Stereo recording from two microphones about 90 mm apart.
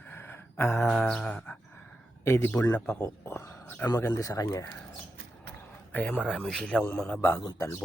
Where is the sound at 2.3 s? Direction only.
30° left (ahead or behind).